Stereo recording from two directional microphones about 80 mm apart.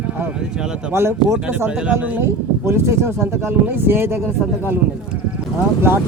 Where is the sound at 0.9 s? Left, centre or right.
Right.